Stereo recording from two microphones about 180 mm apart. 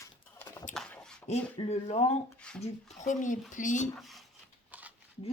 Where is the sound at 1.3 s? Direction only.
35° left (ahead or behind).